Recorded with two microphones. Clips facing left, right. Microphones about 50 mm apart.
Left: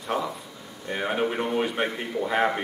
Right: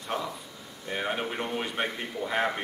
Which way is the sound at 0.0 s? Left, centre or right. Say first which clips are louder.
Left 5 dB; centre.